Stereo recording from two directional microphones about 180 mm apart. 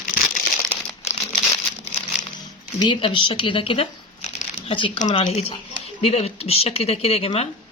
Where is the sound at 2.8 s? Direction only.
25° left (ahead or behind).